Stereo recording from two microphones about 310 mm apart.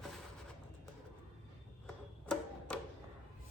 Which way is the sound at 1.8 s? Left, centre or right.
Centre.